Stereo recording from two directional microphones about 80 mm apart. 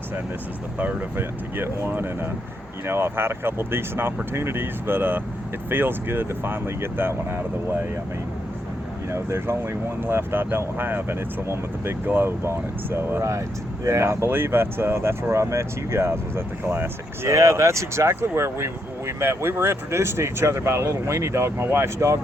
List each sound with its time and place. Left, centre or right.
0.8 s speech: right
9.1 s speech: right
17.3 s speech: right